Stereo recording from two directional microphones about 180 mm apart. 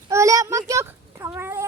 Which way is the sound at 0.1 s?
15° right (ahead or behind).